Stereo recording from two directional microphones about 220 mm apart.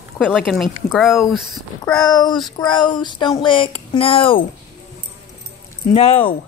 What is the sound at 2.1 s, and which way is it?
Speech, 20° left (ahead or behind).